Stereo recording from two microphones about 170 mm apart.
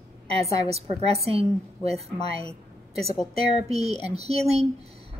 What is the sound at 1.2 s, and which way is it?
A woman's voice, 35° right (ahead or behind).